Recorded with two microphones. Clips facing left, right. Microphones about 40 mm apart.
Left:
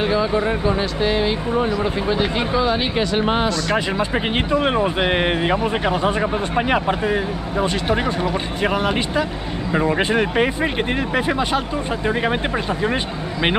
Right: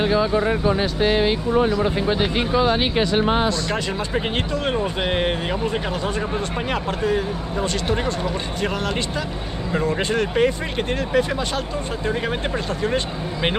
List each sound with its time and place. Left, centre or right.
2.0 s speech: right
3.0 s speech: left
3.7 s speech: left